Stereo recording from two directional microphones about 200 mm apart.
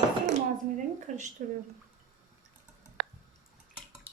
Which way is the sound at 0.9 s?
40° right (ahead or behind).